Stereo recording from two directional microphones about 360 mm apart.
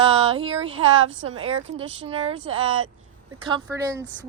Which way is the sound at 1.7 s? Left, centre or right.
Right.